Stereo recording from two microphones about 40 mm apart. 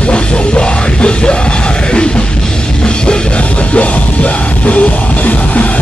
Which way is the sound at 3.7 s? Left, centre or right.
Left.